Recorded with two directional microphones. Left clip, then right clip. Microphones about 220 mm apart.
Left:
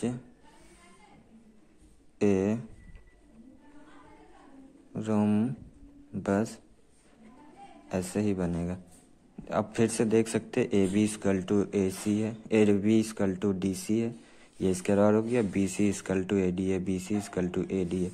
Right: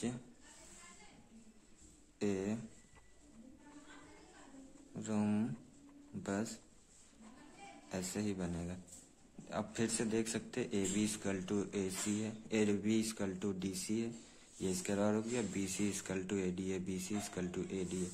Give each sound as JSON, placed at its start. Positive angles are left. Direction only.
{"t": 2.1, "sound": "speech", "side_deg": 25}
{"t": 4.9, "sound": "speech", "side_deg": 20}
{"t": 7.9, "sound": "speech", "side_deg": 20}